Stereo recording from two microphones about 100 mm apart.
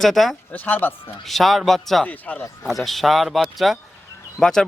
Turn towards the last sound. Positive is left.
turn(degrees=5)  # may be behind; listen again after turning